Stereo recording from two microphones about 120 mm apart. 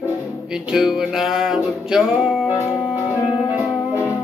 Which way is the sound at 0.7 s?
5° right (ahead or behind).